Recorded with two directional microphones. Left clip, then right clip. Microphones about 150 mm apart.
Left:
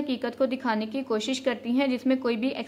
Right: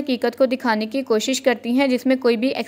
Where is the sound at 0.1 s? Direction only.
35° right (ahead or behind).